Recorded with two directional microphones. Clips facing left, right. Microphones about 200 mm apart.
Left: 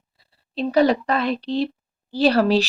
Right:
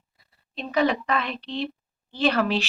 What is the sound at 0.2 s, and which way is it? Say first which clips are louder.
Speech: left 10 dB; 35° left (ahead or behind).